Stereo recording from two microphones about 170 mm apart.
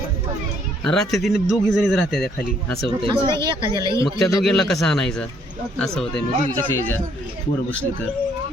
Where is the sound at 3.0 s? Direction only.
30° right (ahead or behind).